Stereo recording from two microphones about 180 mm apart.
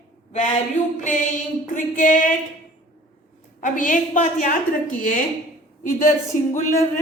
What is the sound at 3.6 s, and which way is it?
Speech, 45° left (ahead or behind).